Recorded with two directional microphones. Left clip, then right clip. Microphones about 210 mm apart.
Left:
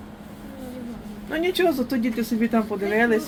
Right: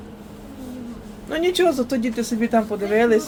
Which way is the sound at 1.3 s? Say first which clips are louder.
Right 3 dB; 15° right (ahead or behind).